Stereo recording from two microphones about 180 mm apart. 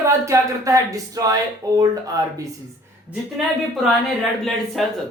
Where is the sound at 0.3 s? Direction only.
20° right (ahead or behind).